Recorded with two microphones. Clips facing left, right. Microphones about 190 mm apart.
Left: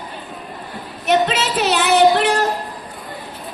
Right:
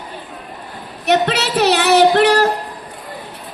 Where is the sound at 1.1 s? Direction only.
65° right (ahead or behind).